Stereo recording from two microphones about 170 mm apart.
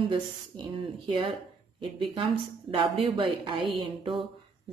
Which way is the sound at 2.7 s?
30° right (ahead or behind).